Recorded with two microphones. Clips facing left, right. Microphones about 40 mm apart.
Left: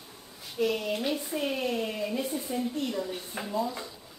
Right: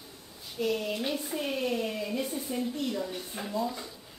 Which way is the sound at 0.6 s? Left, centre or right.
Centre.